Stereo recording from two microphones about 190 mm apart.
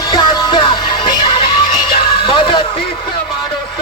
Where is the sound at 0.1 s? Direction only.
25° left (ahead or behind).